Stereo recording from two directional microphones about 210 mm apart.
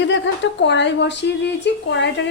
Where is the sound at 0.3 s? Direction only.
60° left (ahead or behind).